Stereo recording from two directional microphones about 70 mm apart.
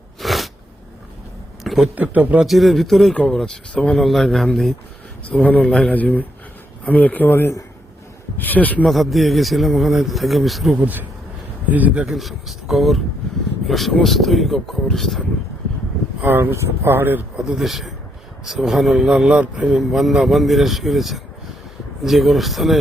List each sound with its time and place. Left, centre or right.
0.2 s a sound: centre
1.6 s speech: centre
2.0 s a man's voice: right
2.4 s a man's voice: centre
5.3 s a man's voice: centre
8.9 s a man's voice: centre
10.8 s a man's voice: right
12.0 s a man's voice: centre
16.2 s speech: right
17.3 s speech: centre
17.6 s a man's voice: centre
19.8 s a man's voice: centre